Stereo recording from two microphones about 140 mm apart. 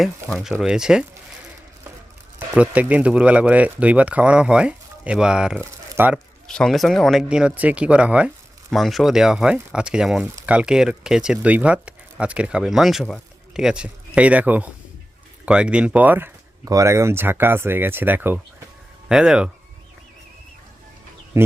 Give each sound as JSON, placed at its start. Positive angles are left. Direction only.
{"t": 0.4, "sound": "speech", "side_deg": -5}
{"t": 2.6, "sound": "speech", "side_deg": -10}
{"t": 6.5, "sound": "speech", "side_deg": 5}
{"t": 21.3, "sound": "speech", "side_deg": -20}